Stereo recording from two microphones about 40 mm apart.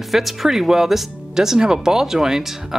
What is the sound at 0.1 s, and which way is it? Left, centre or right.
Speech, centre.